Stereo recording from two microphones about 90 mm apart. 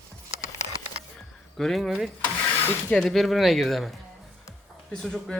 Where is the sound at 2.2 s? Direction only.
15° left (ahead or behind).